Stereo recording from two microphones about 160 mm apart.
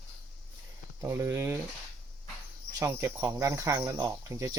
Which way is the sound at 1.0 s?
20° right (ahead or behind).